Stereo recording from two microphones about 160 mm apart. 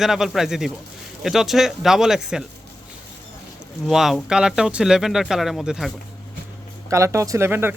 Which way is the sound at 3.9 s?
Centre (ahead or behind).